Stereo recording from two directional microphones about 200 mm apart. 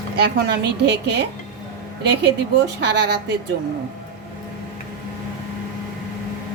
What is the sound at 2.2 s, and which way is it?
Speech, 60° right (ahead or behind).